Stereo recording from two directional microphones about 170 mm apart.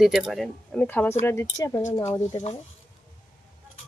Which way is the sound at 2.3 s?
40° left (ahead or behind).